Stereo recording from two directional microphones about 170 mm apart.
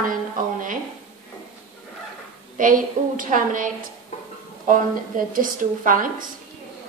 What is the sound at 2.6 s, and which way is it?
A woman's voice, 55° right (ahead or behind).